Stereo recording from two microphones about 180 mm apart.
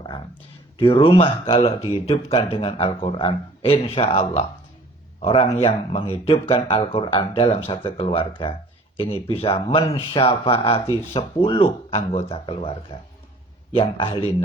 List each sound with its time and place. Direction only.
0.8 s speech: 30° left (ahead or behind)